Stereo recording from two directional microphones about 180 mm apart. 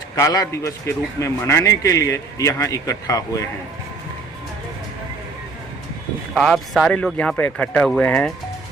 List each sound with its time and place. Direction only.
0.2 s a man's voice: 20° left (ahead or behind)
6.3 s speech: centre (ahead or behind)